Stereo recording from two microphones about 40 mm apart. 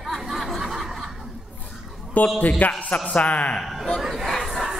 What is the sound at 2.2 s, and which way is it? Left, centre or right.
A man's voice, left.